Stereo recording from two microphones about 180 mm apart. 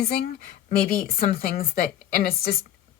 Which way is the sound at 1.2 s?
50° left (ahead or behind).